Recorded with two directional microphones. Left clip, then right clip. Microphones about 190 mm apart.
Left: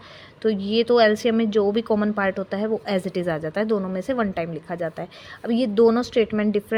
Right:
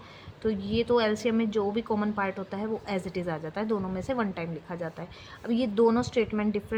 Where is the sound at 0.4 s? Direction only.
35° left (ahead or behind).